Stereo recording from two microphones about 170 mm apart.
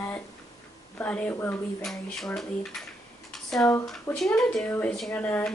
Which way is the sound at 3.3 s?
5° left (ahead or behind).